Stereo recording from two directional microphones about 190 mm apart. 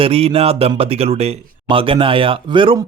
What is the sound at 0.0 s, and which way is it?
Speech, 30° right (ahead or behind).